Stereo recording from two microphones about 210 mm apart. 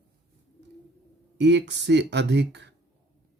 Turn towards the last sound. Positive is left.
turn(degrees=-55)  # may be behind; listen again after turning